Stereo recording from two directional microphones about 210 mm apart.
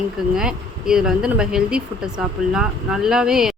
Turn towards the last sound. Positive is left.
turn(degrees=0)  # may be behind; listen again after turning